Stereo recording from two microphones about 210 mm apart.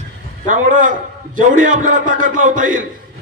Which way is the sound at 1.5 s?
35° right (ahead or behind).